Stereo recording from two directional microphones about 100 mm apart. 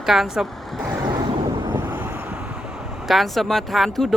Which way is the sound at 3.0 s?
Centre (ahead or behind).